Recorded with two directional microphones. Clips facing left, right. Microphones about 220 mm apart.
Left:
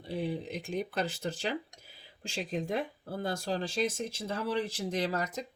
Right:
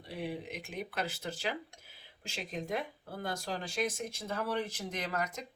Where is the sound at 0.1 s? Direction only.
30° left (ahead or behind).